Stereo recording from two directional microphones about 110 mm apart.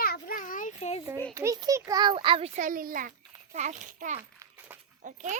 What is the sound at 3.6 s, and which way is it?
A child's voice, 90° right.